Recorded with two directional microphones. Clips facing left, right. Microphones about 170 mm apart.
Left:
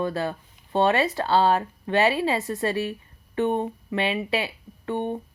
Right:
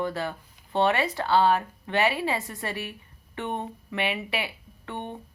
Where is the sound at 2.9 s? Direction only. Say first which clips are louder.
Left 8 dB; 20° left (ahead or behind).